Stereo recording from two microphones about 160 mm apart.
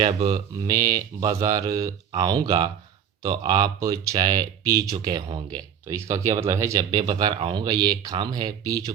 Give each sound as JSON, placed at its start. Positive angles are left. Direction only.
{"t": 0.0, "sound": "speech", "side_deg": -30}
{"t": 0.3, "sound": "speech", "side_deg": -20}